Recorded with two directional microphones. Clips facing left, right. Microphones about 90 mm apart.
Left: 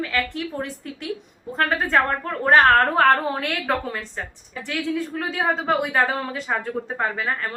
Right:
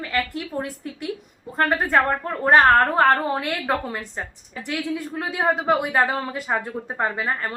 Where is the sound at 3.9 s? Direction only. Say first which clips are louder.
Even; 15° right (ahead or behind).